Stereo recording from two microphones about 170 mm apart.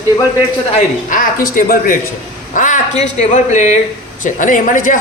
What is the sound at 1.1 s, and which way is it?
A man's voice, 55° left (ahead or behind).